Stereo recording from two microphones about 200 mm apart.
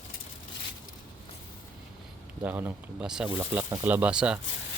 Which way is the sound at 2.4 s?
10° right (ahead or behind).